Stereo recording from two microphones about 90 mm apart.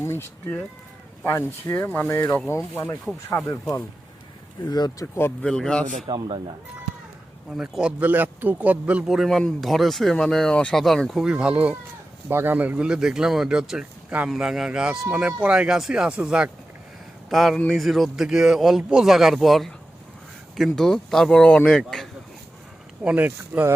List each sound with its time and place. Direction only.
0.0 s speech: 25° left (ahead or behind); by 5.0 s 45° left (ahead or behind)
5.4 s a man's voice: 10° left (ahead or behind)
6.1 s speech: 65° right (ahead or behind)
7.5 s speech: 10° right (ahead or behind)
11.3 s speech: 10° right (ahead or behind)
12.3 s a man's voice: 25° right (ahead or behind); by 22.1 s 5° left (ahead or behind)
23.0 s speech: 20° right (ahead or behind)